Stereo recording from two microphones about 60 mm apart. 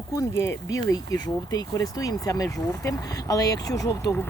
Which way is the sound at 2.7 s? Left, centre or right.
Left.